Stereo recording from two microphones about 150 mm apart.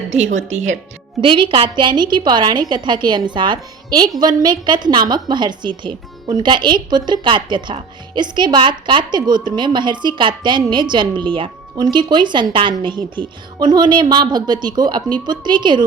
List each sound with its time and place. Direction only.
0.1 s speech: 50° right (ahead or behind)
1.2 s a woman's voice: 35° right (ahead or behind)